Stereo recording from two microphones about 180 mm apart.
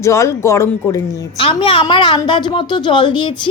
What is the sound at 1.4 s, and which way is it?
A woman's voice, 30° left (ahead or behind).